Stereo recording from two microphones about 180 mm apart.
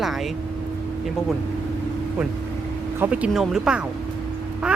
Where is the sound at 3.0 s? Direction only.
10° right (ahead or behind).